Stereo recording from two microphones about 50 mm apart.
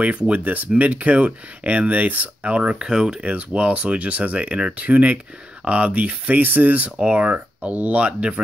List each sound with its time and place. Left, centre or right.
0.3 s speech: right
2.9 s speech: centre
3.2 s speech: right
7.0 s speech: right